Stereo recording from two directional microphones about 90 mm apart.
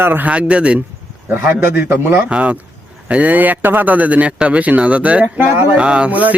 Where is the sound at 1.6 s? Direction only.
25° right (ahead or behind).